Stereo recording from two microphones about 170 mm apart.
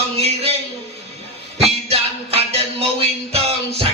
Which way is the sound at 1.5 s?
35° right (ahead or behind).